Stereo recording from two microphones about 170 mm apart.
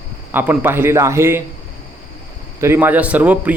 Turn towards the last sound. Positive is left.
turn(degrees=-10)  # may be behind; listen again after turning